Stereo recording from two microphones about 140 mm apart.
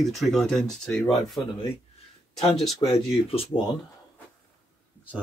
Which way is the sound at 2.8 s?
35° left (ahead or behind).